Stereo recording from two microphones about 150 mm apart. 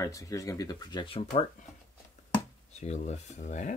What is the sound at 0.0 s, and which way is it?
Speech, 20° left (ahead or behind).